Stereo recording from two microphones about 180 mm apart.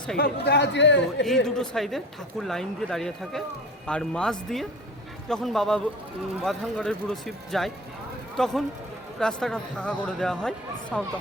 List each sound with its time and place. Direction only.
0.2 s speech: 65° left (ahead or behind)
1.5 s speech: centre (ahead or behind)